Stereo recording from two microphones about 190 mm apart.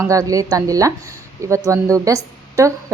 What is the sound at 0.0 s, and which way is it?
A woman's voice, 15° right (ahead or behind).